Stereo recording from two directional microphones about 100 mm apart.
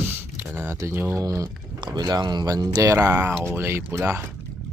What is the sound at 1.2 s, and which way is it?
Speech, 35° right (ahead or behind).